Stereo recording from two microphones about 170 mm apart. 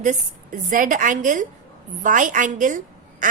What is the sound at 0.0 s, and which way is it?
A woman's voice, 50° right (ahead or behind).